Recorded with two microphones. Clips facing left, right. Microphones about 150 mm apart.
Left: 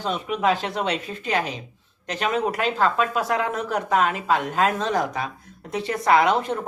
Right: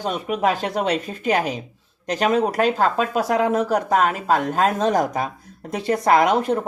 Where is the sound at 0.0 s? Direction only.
45° right (ahead or behind).